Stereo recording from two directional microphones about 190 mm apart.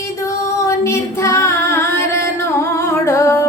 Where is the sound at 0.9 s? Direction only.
15° left (ahead or behind).